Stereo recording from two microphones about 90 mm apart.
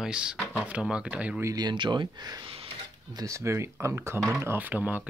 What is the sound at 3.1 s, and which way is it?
Speech, 40° right (ahead or behind).